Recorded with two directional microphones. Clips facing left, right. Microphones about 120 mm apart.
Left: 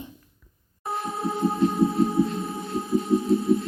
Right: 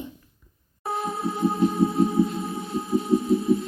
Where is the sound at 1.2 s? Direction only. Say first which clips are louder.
Left 3 dB; centre (ahead or behind).